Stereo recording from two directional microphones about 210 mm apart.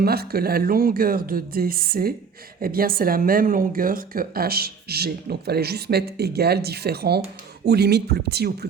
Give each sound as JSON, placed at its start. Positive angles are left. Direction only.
{"t": 0.0, "sound": "speech", "side_deg": -45}